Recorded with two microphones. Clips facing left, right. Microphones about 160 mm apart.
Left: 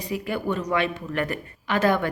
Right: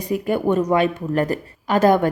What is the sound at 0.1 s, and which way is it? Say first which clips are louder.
Speech: right 8 dB; 50° right (ahead or behind).